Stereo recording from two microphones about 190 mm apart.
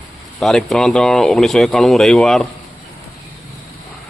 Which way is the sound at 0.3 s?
Centre (ahead or behind).